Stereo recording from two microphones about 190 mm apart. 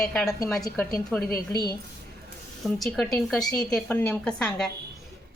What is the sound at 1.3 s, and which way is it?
Speech, 20° left (ahead or behind).